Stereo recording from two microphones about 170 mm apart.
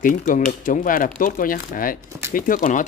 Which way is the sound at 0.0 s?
50° left (ahead or behind).